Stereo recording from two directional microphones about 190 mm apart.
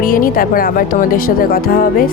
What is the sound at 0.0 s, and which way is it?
Speech, 50° left (ahead or behind).